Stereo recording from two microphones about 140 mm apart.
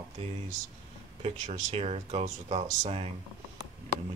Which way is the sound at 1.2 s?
45° right (ahead or behind).